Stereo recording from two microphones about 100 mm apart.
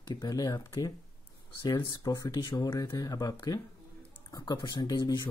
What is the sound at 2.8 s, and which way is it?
Speech, 40° left (ahead or behind).